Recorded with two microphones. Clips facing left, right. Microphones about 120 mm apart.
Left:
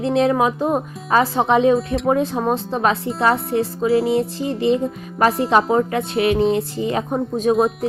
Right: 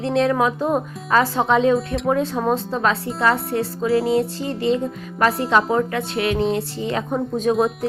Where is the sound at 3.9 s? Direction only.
Centre (ahead or behind).